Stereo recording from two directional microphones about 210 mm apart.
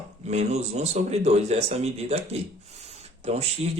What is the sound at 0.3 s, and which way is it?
Speech, 30° right (ahead or behind).